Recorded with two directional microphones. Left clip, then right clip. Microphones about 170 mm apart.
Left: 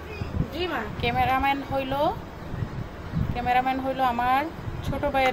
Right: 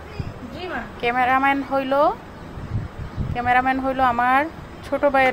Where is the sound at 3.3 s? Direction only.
20° right (ahead or behind).